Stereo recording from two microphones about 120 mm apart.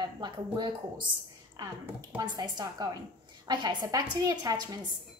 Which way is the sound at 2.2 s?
35° right (ahead or behind).